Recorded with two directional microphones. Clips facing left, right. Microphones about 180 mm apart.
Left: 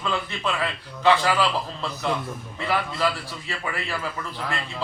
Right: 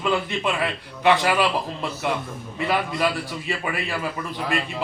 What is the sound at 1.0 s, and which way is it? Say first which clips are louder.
A man's voice: right 1 dB; 15° right (ahead or behind).